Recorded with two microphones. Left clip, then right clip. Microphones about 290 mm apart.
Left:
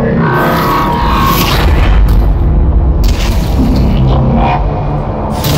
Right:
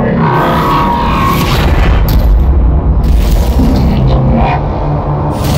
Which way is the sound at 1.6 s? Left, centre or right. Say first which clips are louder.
Right 1 dB; centre.